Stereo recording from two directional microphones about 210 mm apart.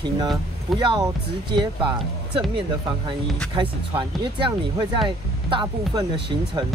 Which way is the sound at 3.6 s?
25° right (ahead or behind).